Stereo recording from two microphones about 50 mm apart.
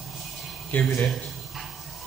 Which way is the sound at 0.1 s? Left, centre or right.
Centre.